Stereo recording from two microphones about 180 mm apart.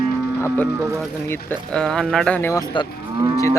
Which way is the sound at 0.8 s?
15° right (ahead or behind).